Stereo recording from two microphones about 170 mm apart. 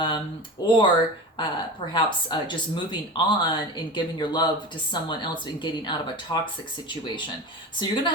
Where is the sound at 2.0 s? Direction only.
30° left (ahead or behind).